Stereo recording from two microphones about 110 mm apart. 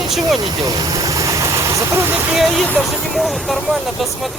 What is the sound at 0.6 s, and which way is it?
Vehicle, 35° right (ahead or behind).